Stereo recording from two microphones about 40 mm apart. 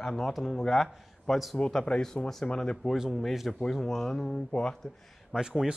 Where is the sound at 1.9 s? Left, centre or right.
Left.